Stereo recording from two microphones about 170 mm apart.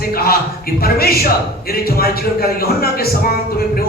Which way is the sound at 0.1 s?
60° left (ahead or behind).